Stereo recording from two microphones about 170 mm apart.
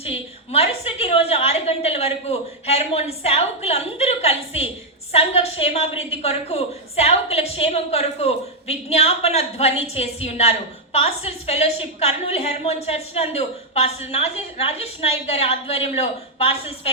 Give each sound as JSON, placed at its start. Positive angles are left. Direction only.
{"t": 0.0, "sound": "a woman's voice", "side_deg": 35}